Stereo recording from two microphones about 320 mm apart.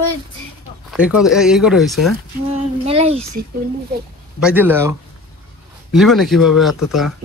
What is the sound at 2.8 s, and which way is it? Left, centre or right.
Speech, centre.